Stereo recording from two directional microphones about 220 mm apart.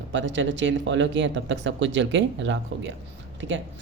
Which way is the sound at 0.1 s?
55° right (ahead or behind).